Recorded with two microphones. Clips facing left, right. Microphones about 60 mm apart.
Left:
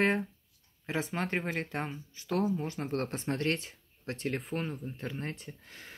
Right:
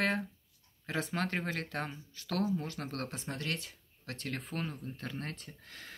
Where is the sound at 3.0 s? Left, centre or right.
Left.